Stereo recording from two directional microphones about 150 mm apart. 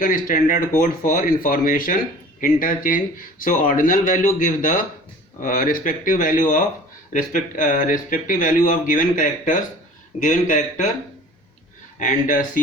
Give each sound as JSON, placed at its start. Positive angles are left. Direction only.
{"t": 0.0, "sound": "speech", "side_deg": 65}
{"t": 11.9, "sound": "speech", "side_deg": 60}